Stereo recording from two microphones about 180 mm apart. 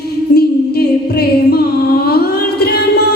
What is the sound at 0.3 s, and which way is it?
Music, 60° left (ahead or behind).